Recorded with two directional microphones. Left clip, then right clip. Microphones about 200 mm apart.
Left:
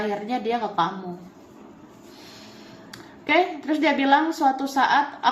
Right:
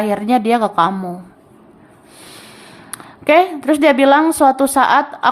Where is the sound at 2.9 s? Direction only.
40° right (ahead or behind).